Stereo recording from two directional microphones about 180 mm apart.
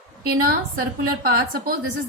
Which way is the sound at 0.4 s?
55° right (ahead or behind).